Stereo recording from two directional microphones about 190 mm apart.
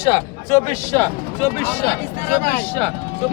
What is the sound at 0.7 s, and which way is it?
Speech, 15° left (ahead or behind).